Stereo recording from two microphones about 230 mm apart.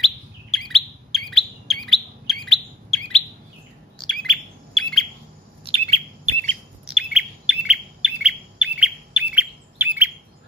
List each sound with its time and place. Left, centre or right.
0.0 s bird: centre
5.7 s chirp: right
6.4 s bird: centre